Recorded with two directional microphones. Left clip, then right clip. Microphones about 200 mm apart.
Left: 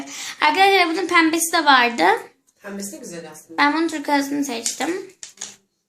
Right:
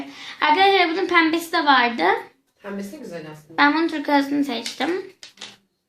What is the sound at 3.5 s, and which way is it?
Speech, 5° left (ahead or behind).